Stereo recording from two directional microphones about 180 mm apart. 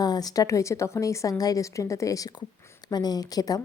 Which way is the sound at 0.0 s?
20° left (ahead or behind).